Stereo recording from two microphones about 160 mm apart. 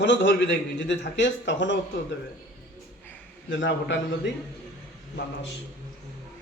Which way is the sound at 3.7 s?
90° left.